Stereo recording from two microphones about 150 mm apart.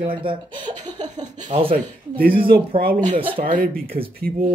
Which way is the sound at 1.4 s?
45° right (ahead or behind).